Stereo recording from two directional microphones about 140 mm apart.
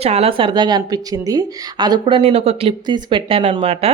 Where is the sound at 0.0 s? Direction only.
45° right (ahead or behind).